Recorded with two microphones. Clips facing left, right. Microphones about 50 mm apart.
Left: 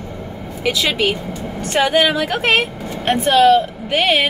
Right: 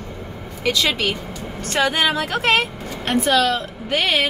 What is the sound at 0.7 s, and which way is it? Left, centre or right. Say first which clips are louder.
Speech: left 2 dB; centre.